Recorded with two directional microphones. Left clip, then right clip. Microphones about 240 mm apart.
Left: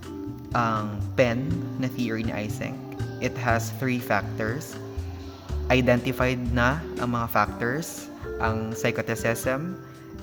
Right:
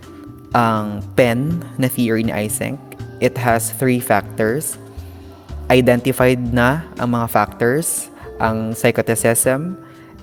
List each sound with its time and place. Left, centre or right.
0.5 s speech: right
5.6 s speech: right